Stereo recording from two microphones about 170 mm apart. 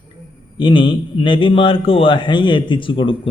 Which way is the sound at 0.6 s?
30° left (ahead or behind).